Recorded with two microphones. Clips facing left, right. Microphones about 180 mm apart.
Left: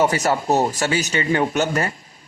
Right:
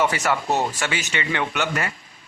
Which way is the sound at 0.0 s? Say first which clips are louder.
Left 3 dB; 40° left (ahead or behind).